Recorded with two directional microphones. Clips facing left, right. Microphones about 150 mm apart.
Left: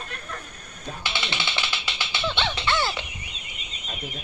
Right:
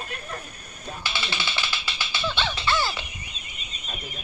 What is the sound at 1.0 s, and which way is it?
Music, 20° left (ahead or behind).